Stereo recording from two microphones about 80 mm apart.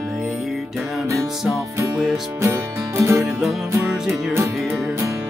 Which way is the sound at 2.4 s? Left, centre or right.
Right.